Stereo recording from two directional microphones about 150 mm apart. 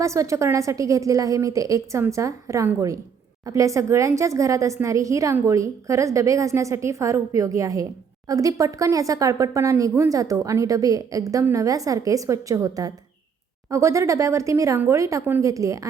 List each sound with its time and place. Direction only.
0.0 s speech: 20° right (ahead or behind)